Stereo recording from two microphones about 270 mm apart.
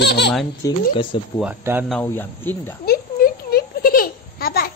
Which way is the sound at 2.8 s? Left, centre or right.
Left.